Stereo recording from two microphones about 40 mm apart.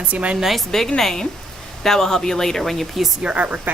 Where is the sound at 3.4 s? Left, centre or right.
Right.